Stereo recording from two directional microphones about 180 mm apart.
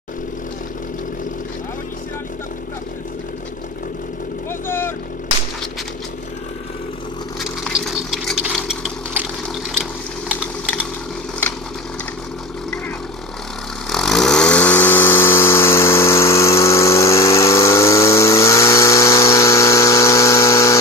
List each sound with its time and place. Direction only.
4.5 s vehicle: 10° left (ahead or behind)
7.3 s engine: centre (ahead or behind)
13.8 s vehicle: 5° left (ahead or behind)